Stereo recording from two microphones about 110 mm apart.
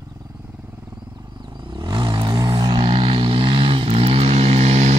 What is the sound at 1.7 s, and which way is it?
Vehicle, 45° right (ahead or behind).